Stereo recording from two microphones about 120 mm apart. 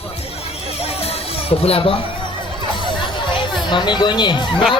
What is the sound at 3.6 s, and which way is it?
Speech, 40° left (ahead or behind).